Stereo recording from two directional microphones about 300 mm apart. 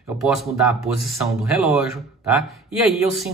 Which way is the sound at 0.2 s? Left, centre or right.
Centre.